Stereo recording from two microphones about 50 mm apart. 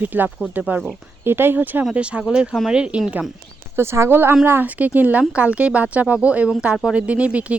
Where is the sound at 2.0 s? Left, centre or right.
Right.